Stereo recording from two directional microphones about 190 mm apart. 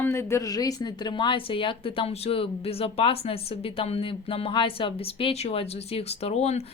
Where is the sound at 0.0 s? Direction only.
15° left (ahead or behind).